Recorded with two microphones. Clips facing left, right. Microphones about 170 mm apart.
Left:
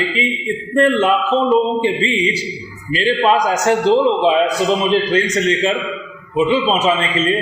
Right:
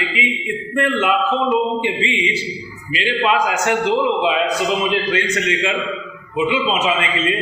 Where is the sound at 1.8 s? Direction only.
35° left (ahead or behind).